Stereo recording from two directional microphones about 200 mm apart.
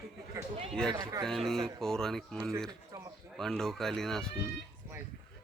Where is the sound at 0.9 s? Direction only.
20° right (ahead or behind).